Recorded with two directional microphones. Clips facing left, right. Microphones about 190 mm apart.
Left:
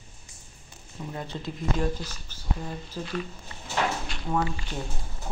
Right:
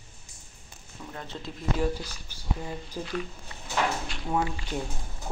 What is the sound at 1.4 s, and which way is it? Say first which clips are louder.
Speech: even; 10° right (ahead or behind).